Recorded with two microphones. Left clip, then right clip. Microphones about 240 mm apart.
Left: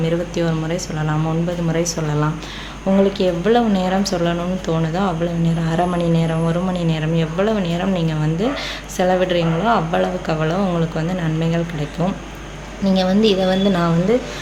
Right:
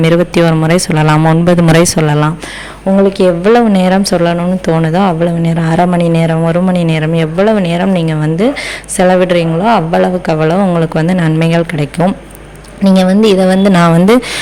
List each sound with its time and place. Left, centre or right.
0.0 s speech: right